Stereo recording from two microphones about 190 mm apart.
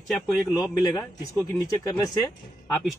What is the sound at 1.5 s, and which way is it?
Speech, 20° left (ahead or behind).